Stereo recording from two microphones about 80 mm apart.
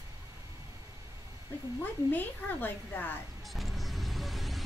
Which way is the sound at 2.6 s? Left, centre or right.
Left.